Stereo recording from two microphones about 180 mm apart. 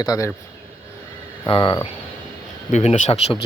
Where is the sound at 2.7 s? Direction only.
40° left (ahead or behind).